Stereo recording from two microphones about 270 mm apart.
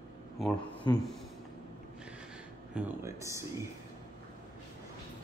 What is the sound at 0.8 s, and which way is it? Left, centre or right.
Speech, centre.